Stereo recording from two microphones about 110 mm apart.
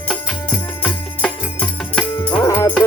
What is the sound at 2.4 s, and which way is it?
Music, 20° left (ahead or behind).